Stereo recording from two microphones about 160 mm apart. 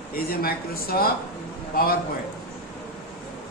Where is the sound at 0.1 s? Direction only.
70° left (ahead or behind).